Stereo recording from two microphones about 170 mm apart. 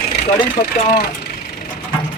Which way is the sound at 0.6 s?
55° left (ahead or behind).